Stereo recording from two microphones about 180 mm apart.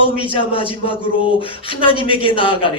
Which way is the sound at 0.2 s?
30° left (ahead or behind).